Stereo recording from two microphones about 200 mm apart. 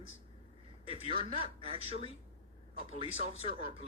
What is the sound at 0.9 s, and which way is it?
Speech, 30° right (ahead or behind).